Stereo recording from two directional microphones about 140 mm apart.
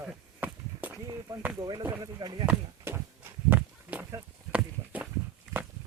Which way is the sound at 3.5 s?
10° right (ahead or behind).